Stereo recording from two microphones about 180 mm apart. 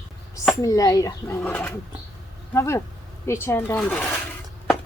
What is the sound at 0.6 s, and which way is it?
A woman's voice, 20° left (ahead or behind).